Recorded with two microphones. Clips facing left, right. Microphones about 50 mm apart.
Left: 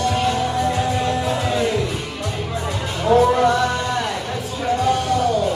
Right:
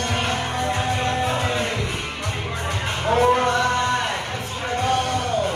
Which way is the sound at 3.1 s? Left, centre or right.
Right.